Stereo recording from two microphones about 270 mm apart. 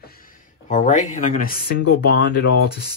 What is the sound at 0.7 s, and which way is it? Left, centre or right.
Speech, left.